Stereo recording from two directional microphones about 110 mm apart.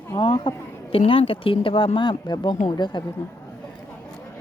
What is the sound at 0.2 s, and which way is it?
Speech, 45° left (ahead or behind).